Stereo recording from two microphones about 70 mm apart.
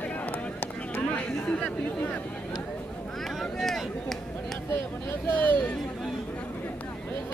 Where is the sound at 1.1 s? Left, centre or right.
Centre.